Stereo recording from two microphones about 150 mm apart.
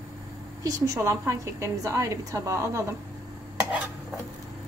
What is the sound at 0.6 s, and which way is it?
A woman's voice, 20° right (ahead or behind).